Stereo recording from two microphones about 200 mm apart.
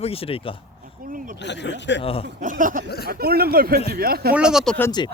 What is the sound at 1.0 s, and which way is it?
Speech, 40° right (ahead or behind).